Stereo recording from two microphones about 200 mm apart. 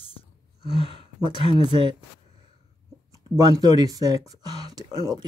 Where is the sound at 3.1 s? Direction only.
15° right (ahead or behind).